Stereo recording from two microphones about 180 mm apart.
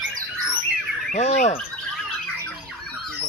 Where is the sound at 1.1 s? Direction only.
40° left (ahead or behind).